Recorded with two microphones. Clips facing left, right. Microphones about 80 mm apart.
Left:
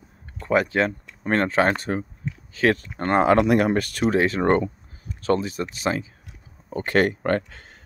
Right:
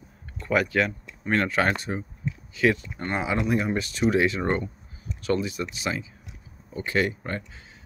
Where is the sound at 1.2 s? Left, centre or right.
Left.